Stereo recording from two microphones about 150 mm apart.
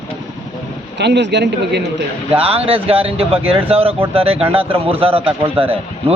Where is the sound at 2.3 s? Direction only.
40° right (ahead or behind).